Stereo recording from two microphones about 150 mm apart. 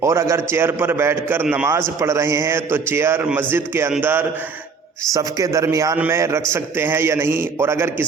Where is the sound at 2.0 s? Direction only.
20° right (ahead or behind).